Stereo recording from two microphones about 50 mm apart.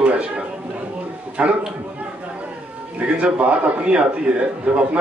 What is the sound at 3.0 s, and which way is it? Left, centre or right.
Speech, right.